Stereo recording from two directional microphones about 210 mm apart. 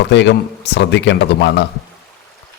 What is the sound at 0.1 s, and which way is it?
A man's voice, 55° left (ahead or behind).